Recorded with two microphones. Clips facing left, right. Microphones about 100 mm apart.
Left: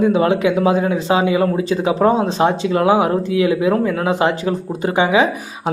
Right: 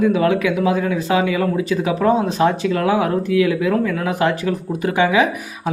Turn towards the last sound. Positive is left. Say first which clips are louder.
# left 2 dB
turn(degrees=25)  # may be behind; listen again after turning